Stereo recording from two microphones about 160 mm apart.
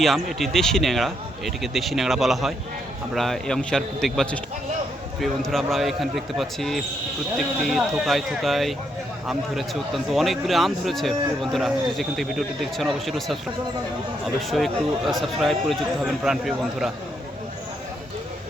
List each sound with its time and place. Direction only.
0.0 s a man's voice: centre (ahead or behind)
14.5 s a man's voice: centre (ahead or behind)